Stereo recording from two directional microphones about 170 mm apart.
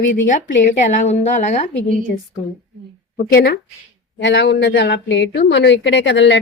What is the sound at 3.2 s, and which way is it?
Speech, 65° left (ahead or behind).